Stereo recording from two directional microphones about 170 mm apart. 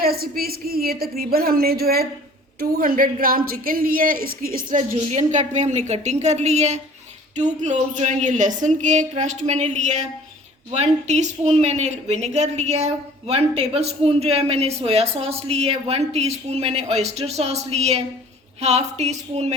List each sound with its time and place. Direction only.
0.0 s speech: 65° right (ahead or behind)
5.1 s a woman's voice: 45° right (ahead or behind)